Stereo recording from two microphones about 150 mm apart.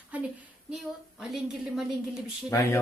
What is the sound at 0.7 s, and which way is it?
A woman's voice, centre (ahead or behind).